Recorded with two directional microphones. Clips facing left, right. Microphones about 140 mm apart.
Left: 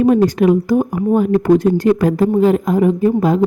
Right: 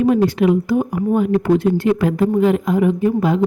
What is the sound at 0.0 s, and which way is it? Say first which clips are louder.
Speech: left 3 dB; 40° left (ahead or behind).